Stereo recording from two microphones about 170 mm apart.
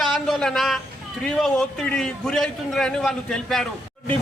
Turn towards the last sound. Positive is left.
turn(degrees=5)  # may be behind; listen again after turning